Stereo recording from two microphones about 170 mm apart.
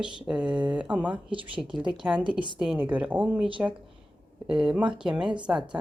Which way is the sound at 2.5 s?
5° right (ahead or behind).